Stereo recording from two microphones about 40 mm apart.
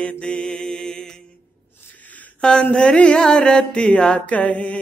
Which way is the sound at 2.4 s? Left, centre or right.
Left.